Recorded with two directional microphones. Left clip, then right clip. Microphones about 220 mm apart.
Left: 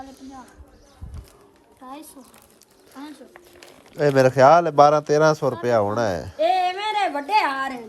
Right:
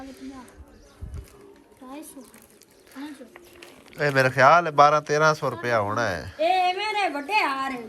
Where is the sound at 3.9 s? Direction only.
25° left (ahead or behind).